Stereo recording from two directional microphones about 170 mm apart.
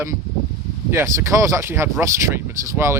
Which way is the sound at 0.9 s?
15° right (ahead or behind).